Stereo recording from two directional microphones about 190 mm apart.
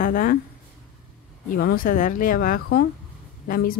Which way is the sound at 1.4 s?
50° left (ahead or behind).